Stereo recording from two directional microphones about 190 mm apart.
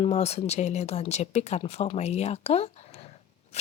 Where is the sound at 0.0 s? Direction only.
35° left (ahead or behind).